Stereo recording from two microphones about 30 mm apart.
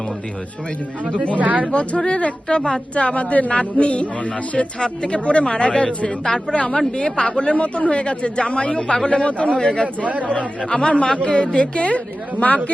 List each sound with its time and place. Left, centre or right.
1.4 s speech: right
1.7 s speech: left
2.5 s speech: left
2.9 s speech: left
4.8 s speech: left
6.2 s speech: left
7.5 s speech: left